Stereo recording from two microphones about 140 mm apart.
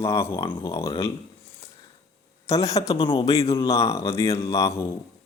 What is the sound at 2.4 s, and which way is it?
Speech, 25° left (ahead or behind).